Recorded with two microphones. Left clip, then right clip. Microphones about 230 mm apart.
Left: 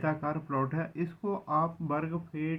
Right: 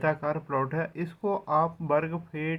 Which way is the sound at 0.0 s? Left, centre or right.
Right.